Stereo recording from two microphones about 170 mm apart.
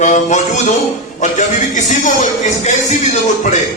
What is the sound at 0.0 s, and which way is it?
Speech, 45° left (ahead or behind).